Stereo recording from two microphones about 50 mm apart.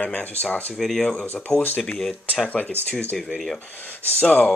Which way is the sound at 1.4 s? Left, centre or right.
Left.